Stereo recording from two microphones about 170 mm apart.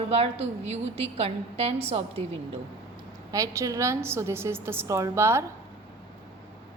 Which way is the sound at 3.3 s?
20° right (ahead or behind).